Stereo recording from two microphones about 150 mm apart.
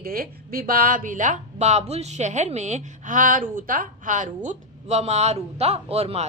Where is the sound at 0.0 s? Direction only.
80° right; by 4.3 s 60° right (ahead or behind).